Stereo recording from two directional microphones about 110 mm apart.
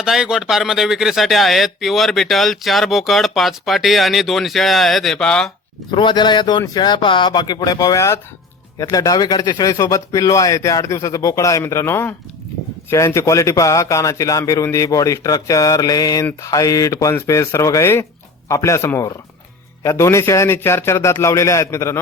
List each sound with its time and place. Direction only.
0.0 s a man's voice: 5° right (ahead or behind)
5.9 s speech: 45° left (ahead or behind); by 21.9 s 25° left (ahead or behind)